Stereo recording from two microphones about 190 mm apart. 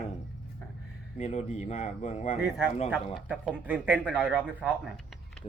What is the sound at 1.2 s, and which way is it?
Speech, 35° left (ahead or behind).